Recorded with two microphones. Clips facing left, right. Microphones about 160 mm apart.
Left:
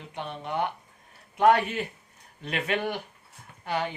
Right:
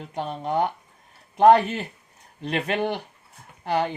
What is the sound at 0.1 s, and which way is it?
Speech, 40° right (ahead or behind).